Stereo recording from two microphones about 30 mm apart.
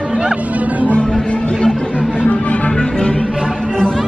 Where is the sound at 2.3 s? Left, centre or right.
Left.